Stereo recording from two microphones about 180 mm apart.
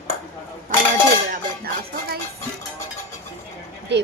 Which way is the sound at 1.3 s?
60° right (ahead or behind).